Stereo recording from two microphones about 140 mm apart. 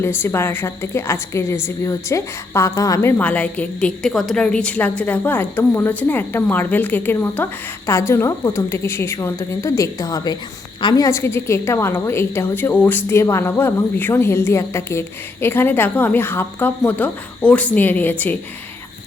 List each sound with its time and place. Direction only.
0.0 s a woman's voice: 15° left (ahead or behind)